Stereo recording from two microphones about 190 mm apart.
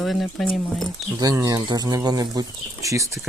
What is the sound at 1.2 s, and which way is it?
Speech, 20° right (ahead or behind).